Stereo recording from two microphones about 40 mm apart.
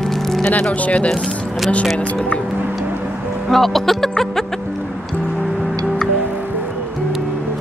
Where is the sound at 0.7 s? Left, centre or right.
Left.